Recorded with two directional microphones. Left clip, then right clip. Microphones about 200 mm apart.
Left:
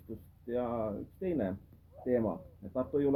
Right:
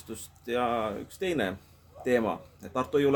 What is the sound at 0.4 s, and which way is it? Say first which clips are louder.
Speech: right 6 dB; 20° right (ahead or behind).